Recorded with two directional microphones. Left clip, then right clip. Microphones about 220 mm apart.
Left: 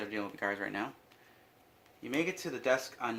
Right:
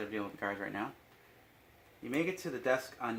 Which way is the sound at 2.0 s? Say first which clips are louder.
Left 1 dB; 10° left (ahead or behind).